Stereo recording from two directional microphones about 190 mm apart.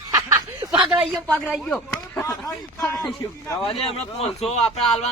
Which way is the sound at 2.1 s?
15° left (ahead or behind).